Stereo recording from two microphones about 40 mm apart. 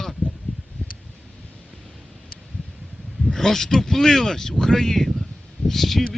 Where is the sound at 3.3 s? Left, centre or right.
Centre.